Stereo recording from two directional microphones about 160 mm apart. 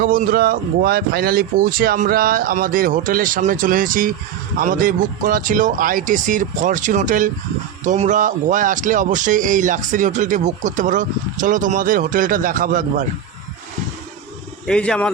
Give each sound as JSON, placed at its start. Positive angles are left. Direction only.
{"t": 0.0, "sound": "speech", "side_deg": -65}
{"t": 14.7, "sound": "speech", "side_deg": 5}